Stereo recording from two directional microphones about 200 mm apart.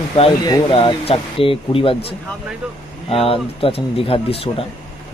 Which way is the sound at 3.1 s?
30° left (ahead or behind).